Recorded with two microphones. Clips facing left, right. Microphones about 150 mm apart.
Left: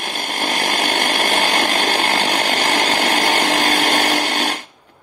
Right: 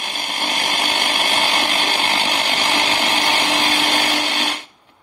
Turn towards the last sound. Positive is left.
turn(degrees=45)  # may be behind; listen again after turning